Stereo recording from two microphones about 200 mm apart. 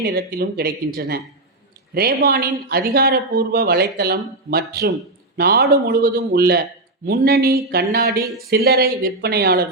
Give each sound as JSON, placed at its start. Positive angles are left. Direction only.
{"t": 0.0, "sound": "speech", "side_deg": -50}